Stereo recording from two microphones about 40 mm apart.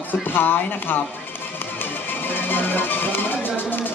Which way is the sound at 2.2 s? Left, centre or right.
Left.